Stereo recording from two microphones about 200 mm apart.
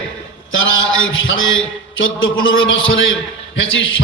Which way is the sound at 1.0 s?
75° left (ahead or behind).